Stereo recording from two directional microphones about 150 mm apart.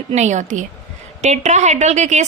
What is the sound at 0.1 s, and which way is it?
A woman's voice, 50° right (ahead or behind).